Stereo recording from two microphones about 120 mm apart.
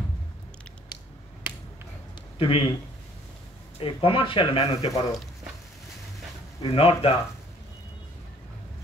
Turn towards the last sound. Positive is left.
turn(degrees=50)  # may be behind; listen again after turning